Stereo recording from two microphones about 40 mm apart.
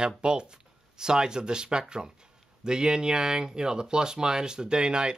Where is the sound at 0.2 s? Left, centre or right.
Right.